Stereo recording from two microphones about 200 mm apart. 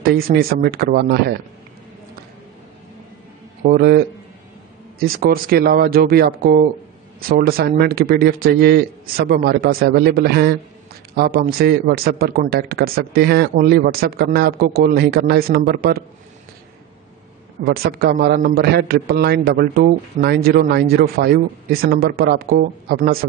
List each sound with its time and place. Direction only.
0.0 s a man's voice: 50° right (ahead or behind)
3.6 s a man's voice: 50° right (ahead or behind)
17.6 s a man's voice: 50° right (ahead or behind)